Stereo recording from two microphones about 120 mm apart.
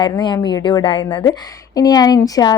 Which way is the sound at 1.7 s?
30° left (ahead or behind).